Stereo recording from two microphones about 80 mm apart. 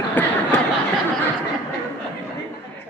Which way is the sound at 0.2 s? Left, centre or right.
Left.